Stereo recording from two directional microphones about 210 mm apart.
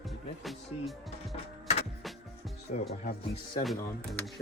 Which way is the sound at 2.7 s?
35° left (ahead or behind).